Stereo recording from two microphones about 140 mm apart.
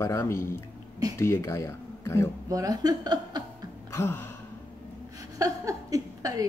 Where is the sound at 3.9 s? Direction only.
15° left (ahead or behind).